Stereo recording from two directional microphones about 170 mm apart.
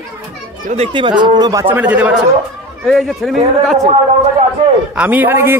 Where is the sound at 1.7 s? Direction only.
10° right (ahead or behind).